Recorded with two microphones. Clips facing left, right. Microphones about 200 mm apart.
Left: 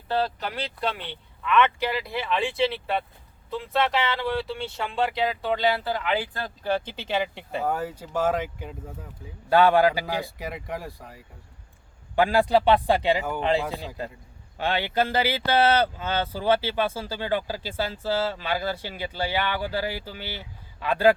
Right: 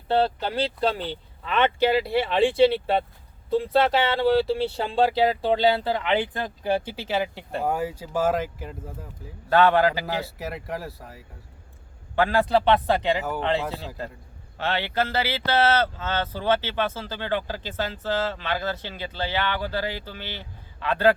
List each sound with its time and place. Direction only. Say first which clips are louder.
0.1 s speech: right 4 dB; 30° right (ahead or behind); by 9.0 s 5° right (ahead or behind)
9.5 s speech: even; 10° left (ahead or behind)
10.2 s speech: right 1 dB; 5° right (ahead or behind)
12.1 s speech: left 1 dB; 15° left (ahead or behind)